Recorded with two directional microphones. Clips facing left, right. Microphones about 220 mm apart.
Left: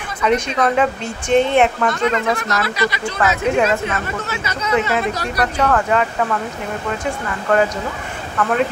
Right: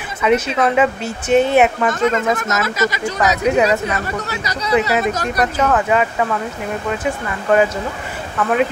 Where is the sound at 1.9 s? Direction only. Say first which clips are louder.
Right 2 dB; 45° right (ahead or behind).